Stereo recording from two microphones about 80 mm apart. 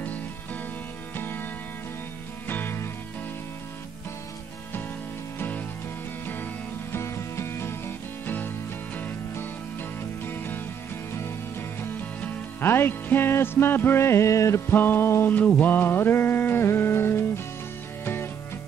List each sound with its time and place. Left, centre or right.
1.1 s music: left
6.2 s music: left
11.8 s music: left
14.7 s music: left
15.3 s music: left